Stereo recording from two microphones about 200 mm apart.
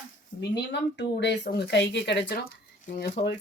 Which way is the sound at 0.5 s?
60° left (ahead or behind).